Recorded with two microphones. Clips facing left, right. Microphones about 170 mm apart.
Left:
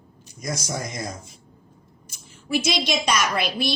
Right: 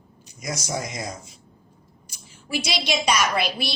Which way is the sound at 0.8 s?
50° left (ahead or behind).